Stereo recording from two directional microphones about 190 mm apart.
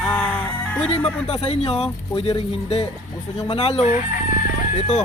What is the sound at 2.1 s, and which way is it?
Crowing, 30° left (ahead or behind).